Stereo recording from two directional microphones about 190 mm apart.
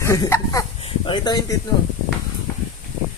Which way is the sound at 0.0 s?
15° left (ahead or behind).